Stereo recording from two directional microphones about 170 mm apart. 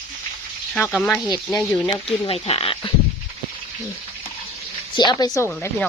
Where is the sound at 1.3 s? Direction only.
30° left (ahead or behind).